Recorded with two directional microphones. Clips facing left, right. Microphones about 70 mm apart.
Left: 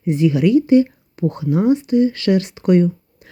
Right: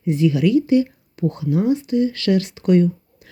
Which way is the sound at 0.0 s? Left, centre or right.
Left.